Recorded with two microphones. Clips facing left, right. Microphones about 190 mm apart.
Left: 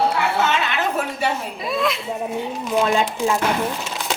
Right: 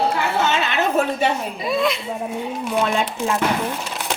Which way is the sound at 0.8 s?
25° right (ahead or behind).